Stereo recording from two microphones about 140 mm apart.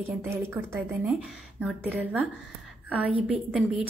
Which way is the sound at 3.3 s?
10° right (ahead or behind).